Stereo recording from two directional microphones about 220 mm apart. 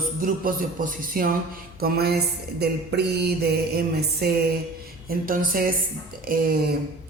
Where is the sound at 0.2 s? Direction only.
40° right (ahead or behind).